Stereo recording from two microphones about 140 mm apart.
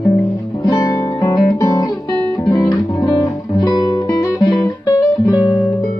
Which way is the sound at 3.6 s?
30° left (ahead or behind).